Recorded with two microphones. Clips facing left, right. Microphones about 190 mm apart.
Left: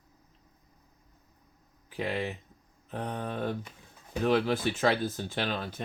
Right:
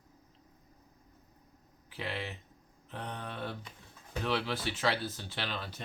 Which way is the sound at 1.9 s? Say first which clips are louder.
Left 7 dB; 45° left (ahead or behind).